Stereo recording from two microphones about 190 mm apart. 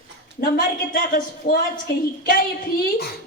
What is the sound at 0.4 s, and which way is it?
A woman's voice, 50° left (ahead or behind).